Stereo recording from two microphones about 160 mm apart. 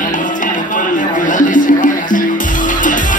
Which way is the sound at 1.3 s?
55° left (ahead or behind).